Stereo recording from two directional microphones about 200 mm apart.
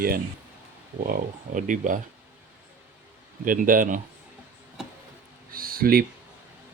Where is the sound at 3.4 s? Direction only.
45° right (ahead or behind).